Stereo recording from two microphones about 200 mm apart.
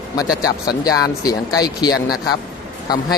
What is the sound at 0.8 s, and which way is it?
Speech, 20° left (ahead or behind).